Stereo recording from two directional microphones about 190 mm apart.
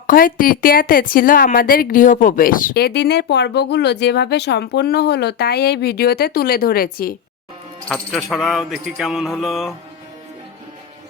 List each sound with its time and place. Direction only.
0.1 s a woman's voice: 45° left (ahead or behind)
7.9 s mantra: 5° left (ahead or behind)